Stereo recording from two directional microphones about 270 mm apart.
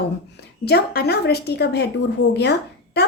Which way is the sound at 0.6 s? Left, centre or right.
Left.